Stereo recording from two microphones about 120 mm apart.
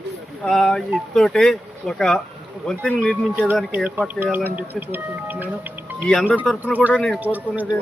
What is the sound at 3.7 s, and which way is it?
Speech, 10° right (ahead or behind).